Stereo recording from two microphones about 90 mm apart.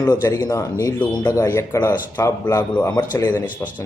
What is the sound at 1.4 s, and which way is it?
A man's voice, 35° left (ahead or behind).